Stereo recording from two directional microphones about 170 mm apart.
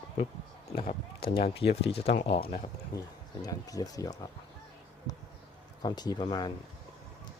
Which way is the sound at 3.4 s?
20° left (ahead or behind).